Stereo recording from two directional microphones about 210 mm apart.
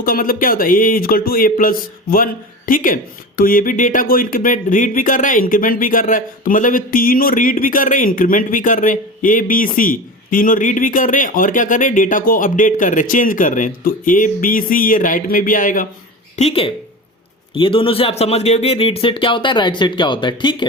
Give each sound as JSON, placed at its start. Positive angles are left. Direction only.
{"t": 0.0, "sound": "speech", "side_deg": 45}
{"t": 16.3, "sound": "a woman's voice", "side_deg": 30}